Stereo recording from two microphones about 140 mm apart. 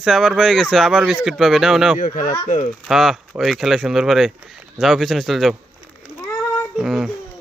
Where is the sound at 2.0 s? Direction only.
70° left (ahead or behind).